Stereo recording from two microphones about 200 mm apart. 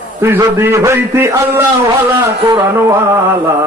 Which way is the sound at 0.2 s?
10° right (ahead or behind).